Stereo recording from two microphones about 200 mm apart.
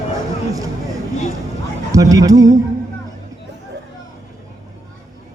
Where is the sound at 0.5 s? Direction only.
15° right (ahead or behind).